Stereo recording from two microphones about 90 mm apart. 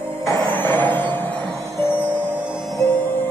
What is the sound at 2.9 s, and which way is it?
Music, 20° left (ahead or behind).